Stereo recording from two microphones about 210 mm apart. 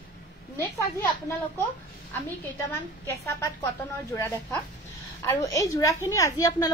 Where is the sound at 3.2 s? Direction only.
15° left (ahead or behind).